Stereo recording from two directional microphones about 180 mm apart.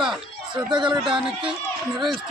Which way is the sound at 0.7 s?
25° right (ahead or behind).